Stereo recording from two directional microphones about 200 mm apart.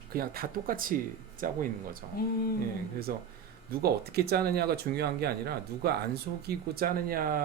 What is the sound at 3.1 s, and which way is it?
Speech, 50° right (ahead or behind).